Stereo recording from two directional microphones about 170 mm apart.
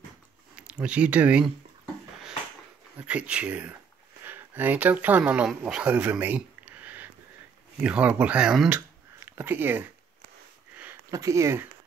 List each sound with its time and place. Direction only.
0.6 s speech: 5° right (ahead or behind)
3.0 s speech: 5° right (ahead or behind)